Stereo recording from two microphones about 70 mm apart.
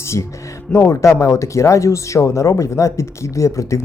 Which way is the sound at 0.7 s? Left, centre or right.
Left.